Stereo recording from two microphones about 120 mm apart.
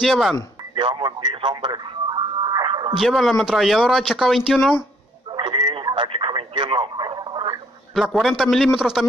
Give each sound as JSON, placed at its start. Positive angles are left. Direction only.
{"t": 0.0, "sound": "speech", "side_deg": 0}
{"t": 0.7, "sound": "radio", "side_deg": -40}
{"t": 3.0, "sound": "speech", "side_deg": 0}
{"t": 5.3, "sound": "telephone", "side_deg": -40}
{"t": 7.9, "sound": "speech", "side_deg": 0}